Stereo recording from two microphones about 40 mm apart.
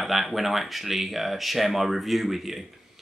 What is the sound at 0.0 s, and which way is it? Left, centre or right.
Speech, centre.